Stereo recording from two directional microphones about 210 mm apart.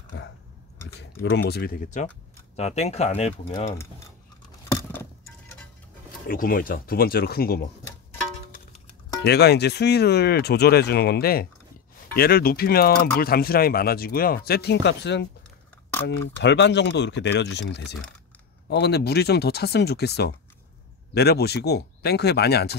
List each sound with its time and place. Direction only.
0.1 s a sound: 60° left (ahead or behind)
0.9 s speech: 55° left (ahead or behind); by 3.7 s 30° left (ahead or behind)
6.2 s speech: 40° left (ahead or behind)
9.2 s speech: 50° left (ahead or behind)